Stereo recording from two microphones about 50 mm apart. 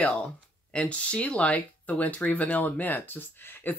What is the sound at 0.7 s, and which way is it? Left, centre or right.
Speech, left.